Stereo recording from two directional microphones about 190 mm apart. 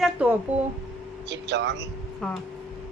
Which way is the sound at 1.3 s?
65° right (ahead or behind).